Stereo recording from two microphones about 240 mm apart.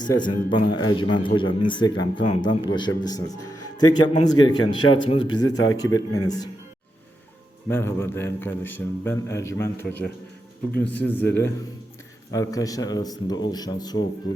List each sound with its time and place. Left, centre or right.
0.0 s a man's voice: centre
7.7 s a man's voice: centre